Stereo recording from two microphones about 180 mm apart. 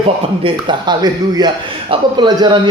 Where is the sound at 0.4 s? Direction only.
25° right (ahead or behind).